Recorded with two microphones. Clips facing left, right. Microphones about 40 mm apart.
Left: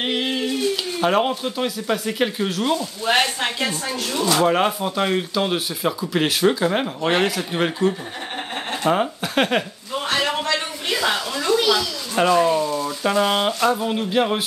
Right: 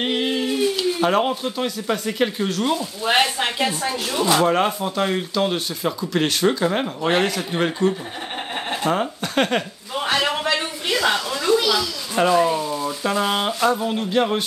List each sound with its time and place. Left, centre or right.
0.0 s a sound: centre
0.5 s speech: centre
3.1 s speech: centre
4.4 s speech: centre
9.9 s a sound: centre
13.0 s speech: centre